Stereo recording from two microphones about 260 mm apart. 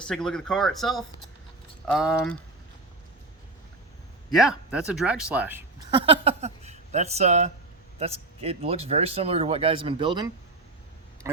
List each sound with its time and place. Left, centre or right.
0.1 s speech: centre
4.3 s speech: centre
5.9 s speech: right